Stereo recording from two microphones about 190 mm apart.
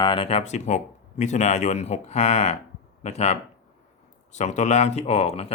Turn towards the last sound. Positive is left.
turn(degrees=35)  # may be behind; listen again after turning